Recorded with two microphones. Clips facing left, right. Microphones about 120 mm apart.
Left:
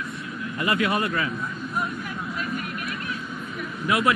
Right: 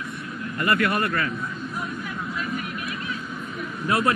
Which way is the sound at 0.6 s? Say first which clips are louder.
Right 1 dB; 55° right (ahead or behind).